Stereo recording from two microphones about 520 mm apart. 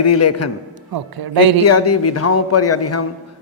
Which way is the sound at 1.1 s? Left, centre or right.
Right.